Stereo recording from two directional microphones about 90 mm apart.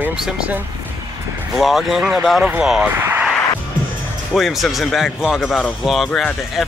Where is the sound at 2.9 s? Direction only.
25° right (ahead or behind).